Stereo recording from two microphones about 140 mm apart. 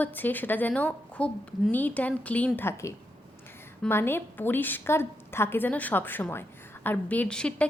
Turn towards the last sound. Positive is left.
turn(degrees=5)  # may be behind; listen again after turning